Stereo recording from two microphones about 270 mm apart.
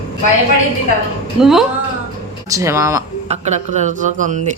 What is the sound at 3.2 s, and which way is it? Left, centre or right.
Speech, right.